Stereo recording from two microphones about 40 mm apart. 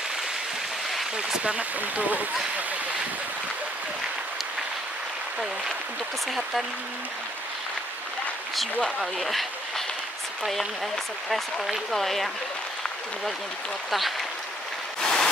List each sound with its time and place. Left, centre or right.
1.4 s speech: right
9.0 s speech: centre
11.2 s speech: centre
13.8 s speech: centre
15.0 s rain: centre